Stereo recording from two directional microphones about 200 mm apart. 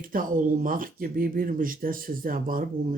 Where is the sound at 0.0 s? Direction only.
45° right (ahead or behind).